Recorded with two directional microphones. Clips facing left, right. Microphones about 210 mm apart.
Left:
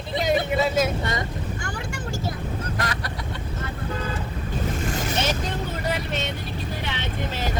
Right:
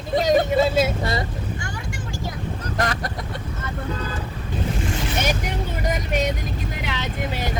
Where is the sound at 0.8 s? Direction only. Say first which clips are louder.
Right 2 dB; 35° right (ahead or behind).